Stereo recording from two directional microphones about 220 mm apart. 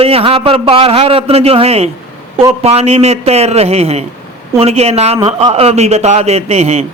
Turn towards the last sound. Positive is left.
turn(degrees=-30)  # may be behind; listen again after turning